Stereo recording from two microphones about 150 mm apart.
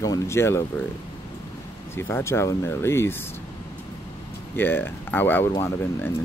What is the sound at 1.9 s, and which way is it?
Speech, 15° left (ahead or behind).